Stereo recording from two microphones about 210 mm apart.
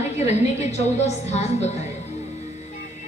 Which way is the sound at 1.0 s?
30° left (ahead or behind).